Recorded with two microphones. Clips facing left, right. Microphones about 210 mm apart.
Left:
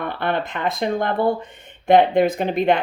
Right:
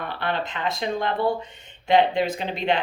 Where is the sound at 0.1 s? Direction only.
55° left (ahead or behind).